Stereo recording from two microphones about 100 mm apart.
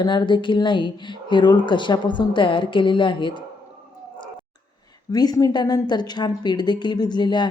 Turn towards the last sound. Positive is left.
turn(degrees=50)  # may be behind; listen again after turning